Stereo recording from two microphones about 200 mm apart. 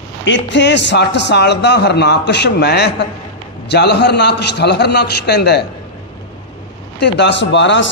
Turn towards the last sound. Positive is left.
turn(degrees=65)  # may be behind; listen again after turning